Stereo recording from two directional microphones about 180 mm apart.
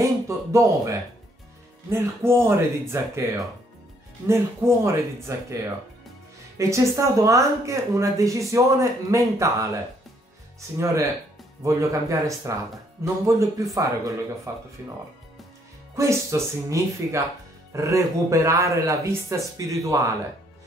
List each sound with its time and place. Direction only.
0.0 s speech: 15° right (ahead or behind)
6.7 s speech: 15° right (ahead or behind)
11.6 s speech: 15° right (ahead or behind)
16.0 s speech: 15° right (ahead or behind)